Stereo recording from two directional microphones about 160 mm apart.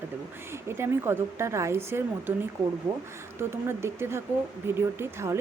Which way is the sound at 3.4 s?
15° right (ahead or behind).